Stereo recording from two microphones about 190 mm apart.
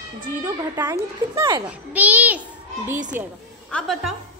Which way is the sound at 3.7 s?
5° left (ahead or behind).